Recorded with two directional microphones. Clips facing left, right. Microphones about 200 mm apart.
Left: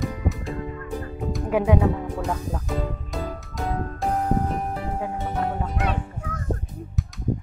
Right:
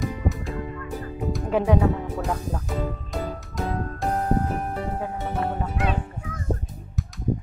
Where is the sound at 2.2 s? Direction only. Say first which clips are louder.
Even; centre (ahead or behind).